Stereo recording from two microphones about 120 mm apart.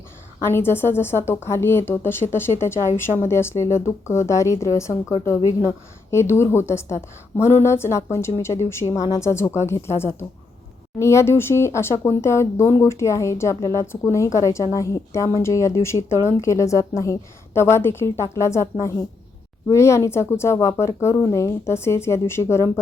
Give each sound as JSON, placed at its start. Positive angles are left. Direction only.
{"t": 0.4, "sound": "speech", "side_deg": 20}